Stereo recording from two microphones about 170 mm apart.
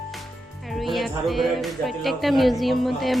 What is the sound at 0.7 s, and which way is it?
Speech, centre (ahead or behind).